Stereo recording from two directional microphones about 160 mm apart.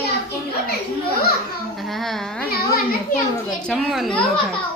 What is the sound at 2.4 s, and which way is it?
Speech, 70° left (ahead or behind).